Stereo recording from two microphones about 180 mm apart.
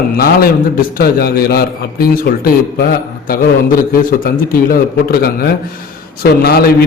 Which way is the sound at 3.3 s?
55° left (ahead or behind).